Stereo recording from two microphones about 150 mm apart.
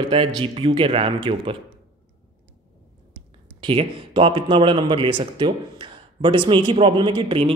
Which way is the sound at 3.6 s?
35° right (ahead or behind).